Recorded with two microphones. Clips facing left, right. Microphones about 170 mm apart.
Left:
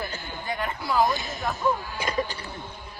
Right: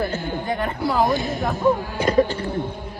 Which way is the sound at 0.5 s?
40° right (ahead or behind).